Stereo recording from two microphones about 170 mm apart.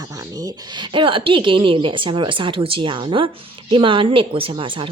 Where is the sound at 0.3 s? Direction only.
25° right (ahead or behind).